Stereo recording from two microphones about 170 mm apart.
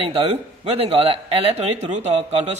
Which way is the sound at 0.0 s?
35° right (ahead or behind).